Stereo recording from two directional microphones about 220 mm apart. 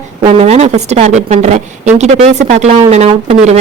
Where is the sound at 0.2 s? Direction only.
30° right (ahead or behind).